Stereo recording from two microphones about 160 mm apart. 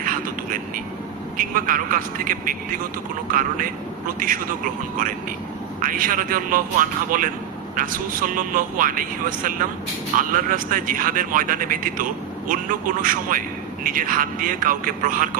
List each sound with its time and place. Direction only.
1.4 s speech: 60° right (ahead or behind)
4.2 s speech: 60° right (ahead or behind)
5.8 s speech: 55° right (ahead or behind)